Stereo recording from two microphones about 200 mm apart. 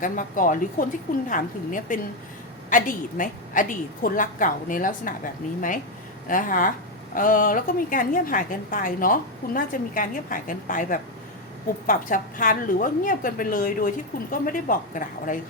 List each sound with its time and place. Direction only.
0.0 s a woman's voice: 40° left (ahead or behind)
6.2 s a woman's voice: 40° left (ahead or behind)